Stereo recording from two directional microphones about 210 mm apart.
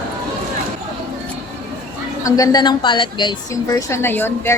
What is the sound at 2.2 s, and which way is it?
A woman's voice, 15° left (ahead or behind).